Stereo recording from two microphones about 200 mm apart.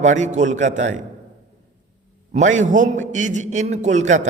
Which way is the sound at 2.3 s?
40° right (ahead or behind).